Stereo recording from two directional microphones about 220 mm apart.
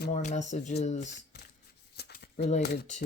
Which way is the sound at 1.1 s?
45° left (ahead or behind).